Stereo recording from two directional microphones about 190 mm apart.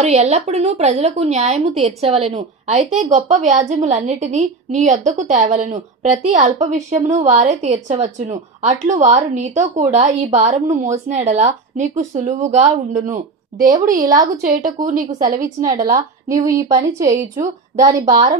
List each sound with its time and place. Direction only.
0.0 s a woman's voice: 35° right (ahead or behind)
12.9 s speech: 20° right (ahead or behind)
14.8 s a woman's voice: 40° right (ahead or behind)
15.9 s speech: 15° right (ahead or behind)
17.0 s a woman's voice: 40° right (ahead or behind)
17.7 s a woman's voice: 20° right (ahead or behind)